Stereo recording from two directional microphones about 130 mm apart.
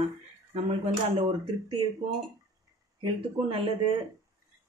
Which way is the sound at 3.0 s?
45° right (ahead or behind).